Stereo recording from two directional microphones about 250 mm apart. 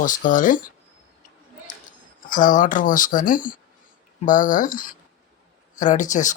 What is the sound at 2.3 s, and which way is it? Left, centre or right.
Speech, left.